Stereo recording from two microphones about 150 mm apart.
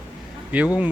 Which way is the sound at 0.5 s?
10° right (ahead or behind).